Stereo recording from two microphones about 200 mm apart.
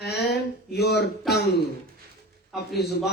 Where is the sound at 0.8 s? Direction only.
55° left (ahead or behind).